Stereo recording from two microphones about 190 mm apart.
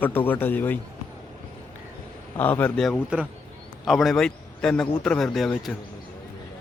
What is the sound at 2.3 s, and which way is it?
A man's voice, 10° left (ahead or behind).